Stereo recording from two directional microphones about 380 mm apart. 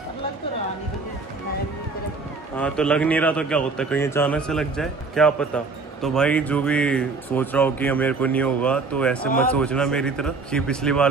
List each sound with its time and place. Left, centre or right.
2.5 s speech: centre